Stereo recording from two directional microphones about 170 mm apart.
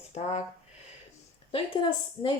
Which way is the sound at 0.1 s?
40° left (ahead or behind).